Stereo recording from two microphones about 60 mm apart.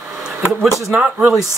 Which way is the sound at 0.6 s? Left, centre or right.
Centre.